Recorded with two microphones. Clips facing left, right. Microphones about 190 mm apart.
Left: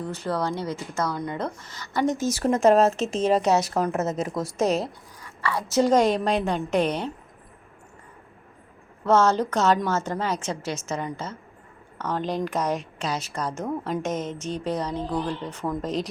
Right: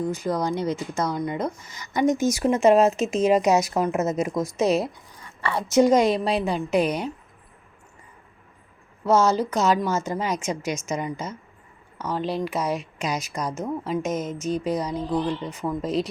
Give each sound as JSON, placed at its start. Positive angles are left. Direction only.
{"t": 0.0, "sound": "speech", "side_deg": -10}
{"t": 5.2, "sound": "a sound", "side_deg": -25}
{"t": 5.7, "sound": "speech", "side_deg": -10}
{"t": 9.0, "sound": "speech", "side_deg": -10}